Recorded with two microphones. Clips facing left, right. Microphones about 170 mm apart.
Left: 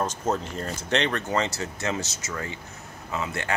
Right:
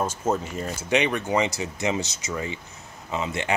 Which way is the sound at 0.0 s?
10° right (ahead or behind).